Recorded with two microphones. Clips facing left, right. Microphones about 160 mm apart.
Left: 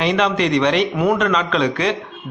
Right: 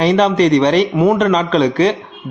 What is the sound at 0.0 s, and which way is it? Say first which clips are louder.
A man's voice: right 6 dB; 35° right (ahead or behind).